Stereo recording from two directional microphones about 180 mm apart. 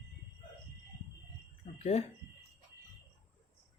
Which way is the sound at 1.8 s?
35° left (ahead or behind).